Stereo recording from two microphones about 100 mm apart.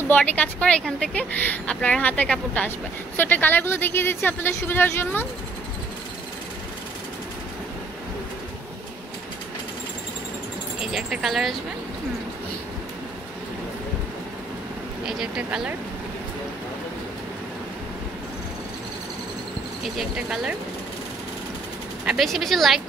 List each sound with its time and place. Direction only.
0.1 s a woman's voice: 15° left (ahead or behind)
10.8 s speech: 5° right (ahead or behind)
15.0 s speech: 5° right (ahead or behind)
19.8 s speech: 5° right (ahead or behind)
22.0 s speech: centre (ahead or behind)